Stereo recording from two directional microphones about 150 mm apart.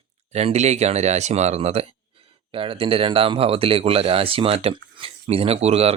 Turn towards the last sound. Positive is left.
turn(degrees=-45)  # may be behind; listen again after turning